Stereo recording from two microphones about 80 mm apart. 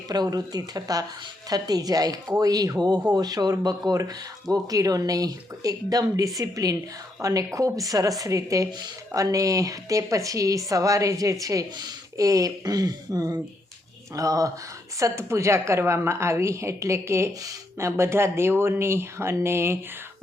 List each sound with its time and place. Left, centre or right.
0.1 s a woman's voice: right